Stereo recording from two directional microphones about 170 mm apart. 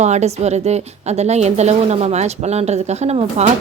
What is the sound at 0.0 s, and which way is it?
Speech, 40° right (ahead or behind).